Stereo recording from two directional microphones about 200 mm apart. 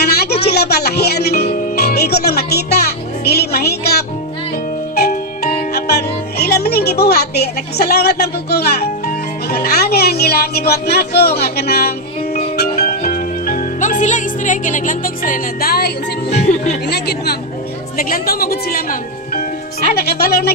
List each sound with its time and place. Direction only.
0.0 s a sound: 55° left (ahead or behind)
0.5 s speech: 55° left (ahead or behind)
4.9 s music: 50° left (ahead or behind)
16.3 s speech: 35° left (ahead or behind)
16.8 s a woman's voice: 55° left (ahead or behind)